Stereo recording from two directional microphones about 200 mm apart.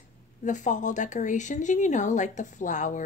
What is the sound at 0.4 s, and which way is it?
Speech, 40° left (ahead or behind).